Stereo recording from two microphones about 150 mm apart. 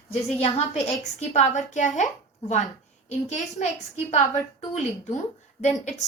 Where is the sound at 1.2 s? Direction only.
50° left (ahead or behind).